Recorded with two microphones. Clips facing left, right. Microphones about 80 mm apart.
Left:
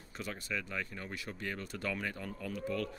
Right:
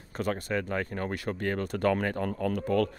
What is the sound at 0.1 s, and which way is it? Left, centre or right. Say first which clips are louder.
Speech: right 10 dB; right.